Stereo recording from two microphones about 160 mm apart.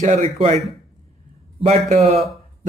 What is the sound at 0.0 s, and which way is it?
Speech, 45° right (ahead or behind).